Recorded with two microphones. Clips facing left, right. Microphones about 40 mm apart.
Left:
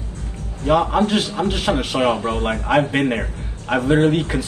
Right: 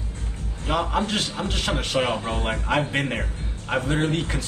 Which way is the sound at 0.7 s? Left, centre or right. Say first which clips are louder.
Left 7 dB; centre.